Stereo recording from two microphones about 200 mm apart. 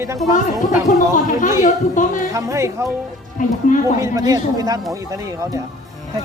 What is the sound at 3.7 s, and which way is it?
Speech, 40° left (ahead or behind).